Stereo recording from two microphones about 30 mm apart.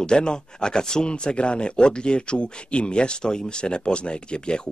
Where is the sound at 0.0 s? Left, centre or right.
Left.